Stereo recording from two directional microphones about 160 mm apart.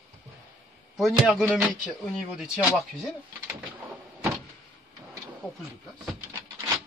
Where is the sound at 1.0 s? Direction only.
5° right (ahead or behind).